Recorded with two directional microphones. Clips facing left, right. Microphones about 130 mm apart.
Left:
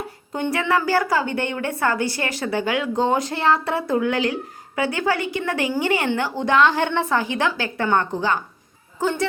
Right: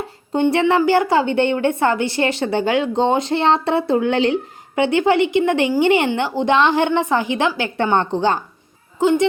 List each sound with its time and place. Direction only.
0.3 s a woman's voice: 25° right (ahead or behind)
9.0 s speech: 15° right (ahead or behind)